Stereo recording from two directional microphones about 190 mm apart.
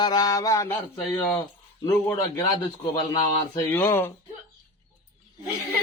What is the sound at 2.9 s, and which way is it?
Mantra, 25° left (ahead or behind).